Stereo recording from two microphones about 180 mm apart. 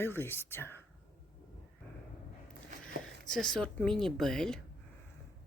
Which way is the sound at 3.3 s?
5° left (ahead or behind).